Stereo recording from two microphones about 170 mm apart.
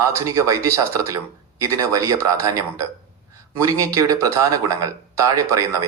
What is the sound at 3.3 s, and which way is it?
Speech, 20° right (ahead or behind).